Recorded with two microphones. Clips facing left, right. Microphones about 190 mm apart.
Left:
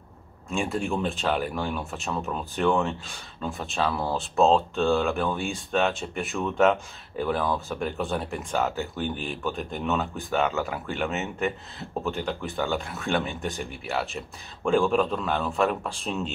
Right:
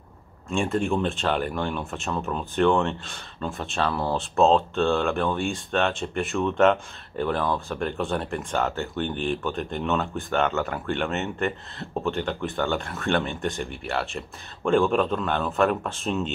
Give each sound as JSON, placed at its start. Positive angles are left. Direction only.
{"t": 0.5, "sound": "speech", "side_deg": 0}